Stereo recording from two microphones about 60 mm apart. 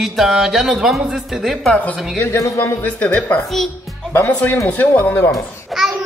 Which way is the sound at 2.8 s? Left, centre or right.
Left.